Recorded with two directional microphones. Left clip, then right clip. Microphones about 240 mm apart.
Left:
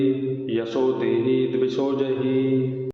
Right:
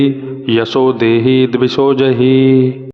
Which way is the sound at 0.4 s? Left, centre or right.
Right.